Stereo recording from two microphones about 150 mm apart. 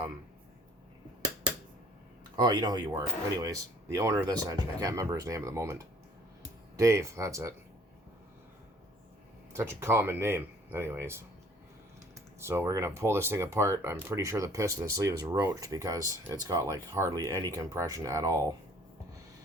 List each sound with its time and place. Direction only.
2.3 s speech: 30° right (ahead or behind)
6.7 s speech: 20° right (ahead or behind)
9.5 s speech: 15° right (ahead or behind)
12.4 s speech: 15° right (ahead or behind)